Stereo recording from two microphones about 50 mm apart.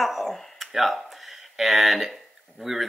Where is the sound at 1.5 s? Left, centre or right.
Centre.